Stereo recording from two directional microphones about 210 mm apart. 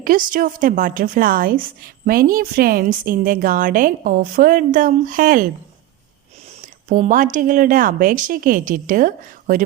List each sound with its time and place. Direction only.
0.0 s a woman's voice: 40° right (ahead or behind)
6.5 s a woman's voice: 35° right (ahead or behind)